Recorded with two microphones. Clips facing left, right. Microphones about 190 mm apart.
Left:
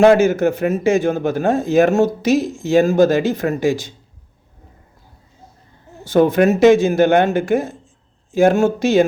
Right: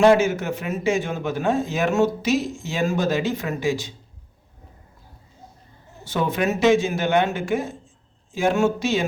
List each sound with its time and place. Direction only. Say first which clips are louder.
0.0 s a man's voice: left 5 dB; 50° left (ahead or behind)
6.1 s a man's voice: left 10 dB; 45° left (ahead or behind)